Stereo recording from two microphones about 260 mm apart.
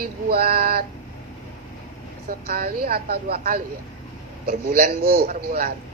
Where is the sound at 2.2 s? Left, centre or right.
Right.